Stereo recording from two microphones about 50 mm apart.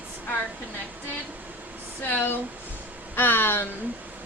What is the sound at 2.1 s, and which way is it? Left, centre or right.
A woman's voice, left.